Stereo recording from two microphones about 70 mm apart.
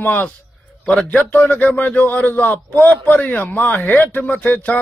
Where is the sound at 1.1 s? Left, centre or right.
Left.